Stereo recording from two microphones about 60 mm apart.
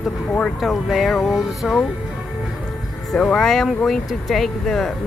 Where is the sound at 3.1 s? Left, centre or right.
Centre.